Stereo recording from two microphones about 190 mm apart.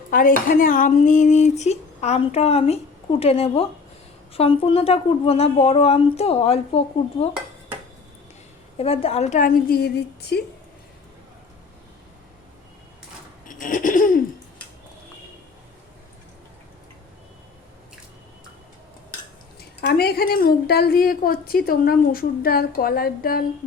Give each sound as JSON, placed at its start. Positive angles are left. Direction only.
{"t": 0.1, "sound": "speech", "side_deg": 45}
{"t": 8.8, "sound": "a woman's voice", "side_deg": 30}
{"t": 13.5, "sound": "a sound", "side_deg": 45}
{"t": 19.8, "sound": "a woman's voice", "side_deg": 55}